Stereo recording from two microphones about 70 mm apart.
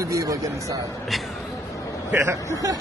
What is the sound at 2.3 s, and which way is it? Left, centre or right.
Speech, right.